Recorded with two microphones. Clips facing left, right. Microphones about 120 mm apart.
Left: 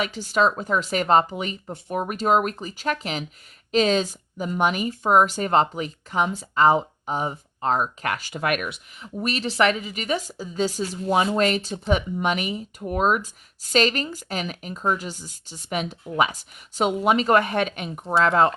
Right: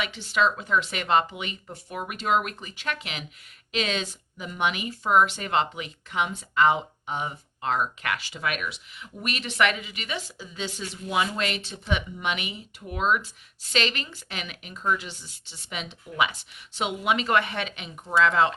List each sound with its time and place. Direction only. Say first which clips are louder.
0.0 s speech: left 4 dB; 40° left (ahead or behind)
9.2 s a woman's voice: left 4 dB; 35° left (ahead or behind)